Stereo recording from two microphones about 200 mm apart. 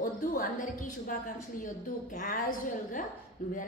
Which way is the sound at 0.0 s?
45° left (ahead or behind).